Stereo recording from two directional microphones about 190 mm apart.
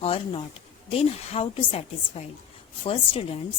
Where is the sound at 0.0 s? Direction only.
30° left (ahead or behind).